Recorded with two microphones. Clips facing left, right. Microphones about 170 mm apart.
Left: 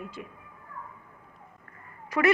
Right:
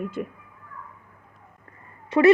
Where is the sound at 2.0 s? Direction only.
30° right (ahead or behind).